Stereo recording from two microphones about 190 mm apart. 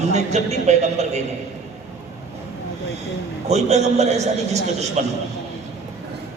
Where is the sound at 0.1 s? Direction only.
35° right (ahead or behind).